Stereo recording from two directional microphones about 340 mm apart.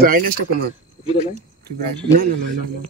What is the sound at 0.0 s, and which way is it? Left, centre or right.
Speech, right.